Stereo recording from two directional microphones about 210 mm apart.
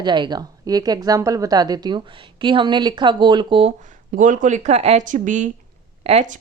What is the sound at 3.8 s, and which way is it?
Speech, 35° right (ahead or behind).